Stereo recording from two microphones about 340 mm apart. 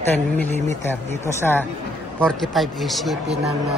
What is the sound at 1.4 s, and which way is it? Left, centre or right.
A man's voice, centre.